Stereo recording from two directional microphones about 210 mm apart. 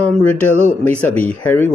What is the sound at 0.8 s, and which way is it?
Speech, 5° left (ahead or behind).